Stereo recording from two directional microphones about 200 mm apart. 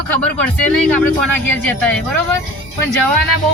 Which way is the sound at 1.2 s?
5° left (ahead or behind).